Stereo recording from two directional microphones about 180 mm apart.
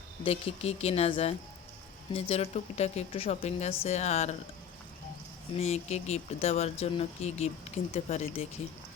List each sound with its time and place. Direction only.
0.3 s a woman's voice: 35° left (ahead or behind)
5.5 s a woman's voice: 35° left (ahead or behind)